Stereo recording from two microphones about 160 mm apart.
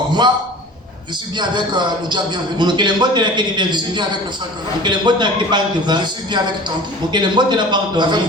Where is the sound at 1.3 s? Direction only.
30° right (ahead or behind).